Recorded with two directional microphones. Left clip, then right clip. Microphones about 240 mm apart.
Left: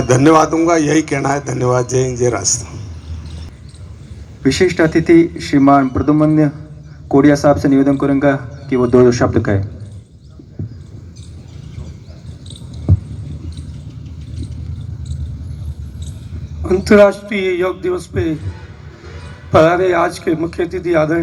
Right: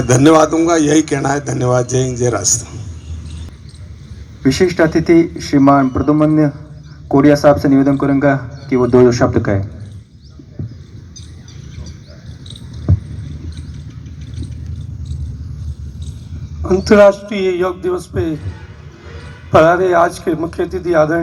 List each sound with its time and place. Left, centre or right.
0.1 s a man's voice: right
4.4 s a man's voice: right
12.9 s heart sounds: right
16.6 s a sound: right
17.2 s speech: right
19.5 s speech: right